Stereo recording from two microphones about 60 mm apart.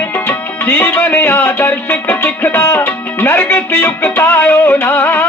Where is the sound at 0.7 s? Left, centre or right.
Left.